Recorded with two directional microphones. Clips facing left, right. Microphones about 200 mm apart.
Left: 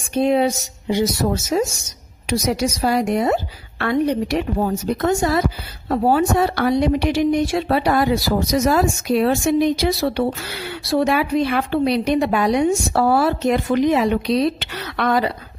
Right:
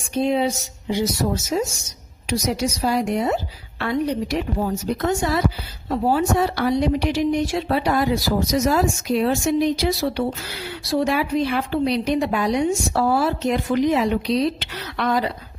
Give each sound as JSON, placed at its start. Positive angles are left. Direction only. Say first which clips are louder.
{"t": 0.1, "sound": "a woman's voice", "louder": "left 3 dB", "side_deg": 60}
{"t": 4.9, "sound": "speech", "louder": "left 4 dB", "side_deg": 45}
{"t": 5.9, "sound": "a woman's voice", "louder": "left 3 dB", "side_deg": 60}